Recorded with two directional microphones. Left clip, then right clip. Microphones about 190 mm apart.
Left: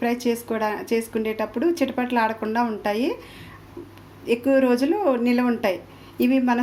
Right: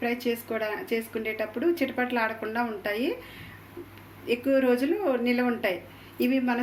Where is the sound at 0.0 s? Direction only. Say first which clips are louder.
Left 5 dB; 60° left (ahead or behind).